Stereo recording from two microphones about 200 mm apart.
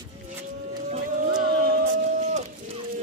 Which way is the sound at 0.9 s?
40° right (ahead or behind).